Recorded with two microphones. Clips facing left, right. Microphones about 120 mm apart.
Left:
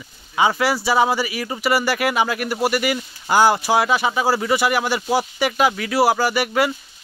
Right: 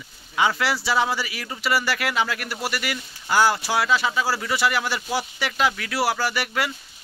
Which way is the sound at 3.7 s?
15° left (ahead or behind).